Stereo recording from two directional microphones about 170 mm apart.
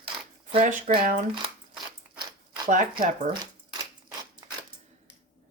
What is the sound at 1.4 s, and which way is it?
Biting, 25° right (ahead or behind).